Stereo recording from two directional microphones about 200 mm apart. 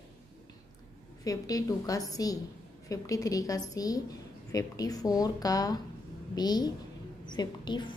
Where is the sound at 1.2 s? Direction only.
20° left (ahead or behind).